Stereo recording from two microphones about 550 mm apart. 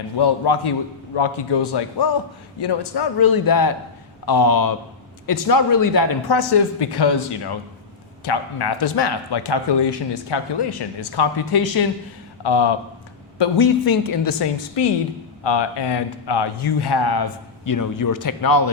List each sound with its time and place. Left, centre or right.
0.2 s a man's voice: left
15.4 s a man's voice: left